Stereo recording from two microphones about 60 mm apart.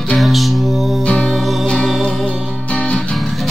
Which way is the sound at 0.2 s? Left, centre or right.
Centre.